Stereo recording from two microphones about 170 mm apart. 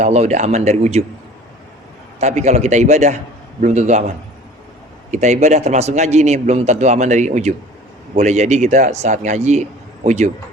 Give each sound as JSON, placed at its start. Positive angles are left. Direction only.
{"t": 0.0, "sound": "speech", "side_deg": -40}
{"t": 2.2, "sound": "a man's voice", "side_deg": -40}
{"t": 5.1, "sound": "a man's voice", "side_deg": -45}